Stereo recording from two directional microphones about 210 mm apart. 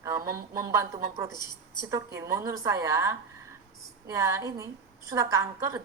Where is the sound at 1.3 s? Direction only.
20° left (ahead or behind).